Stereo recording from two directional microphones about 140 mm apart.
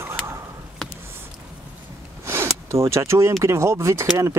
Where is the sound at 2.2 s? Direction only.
20° right (ahead or behind).